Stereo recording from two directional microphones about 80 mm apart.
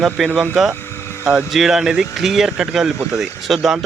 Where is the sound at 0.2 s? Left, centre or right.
Centre.